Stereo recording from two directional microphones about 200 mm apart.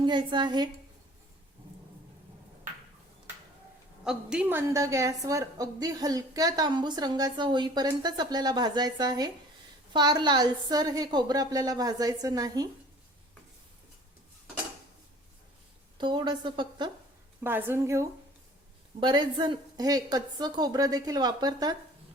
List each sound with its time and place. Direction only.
0.0 s a woman's voice: 25° right (ahead or behind)
4.0 s a woman's voice: 5° right (ahead or behind)
16.0 s a woman's voice: 25° right (ahead or behind)
17.4 s a woman's voice: 10° right (ahead or behind)